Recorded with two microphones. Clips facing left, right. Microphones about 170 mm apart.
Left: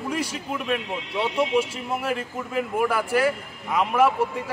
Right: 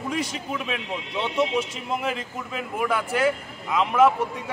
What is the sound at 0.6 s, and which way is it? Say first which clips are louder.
Speech: left 3 dB; centre (ahead or behind).